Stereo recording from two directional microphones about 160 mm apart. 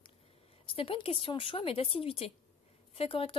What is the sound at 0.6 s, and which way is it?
Speech, 35° left (ahead or behind).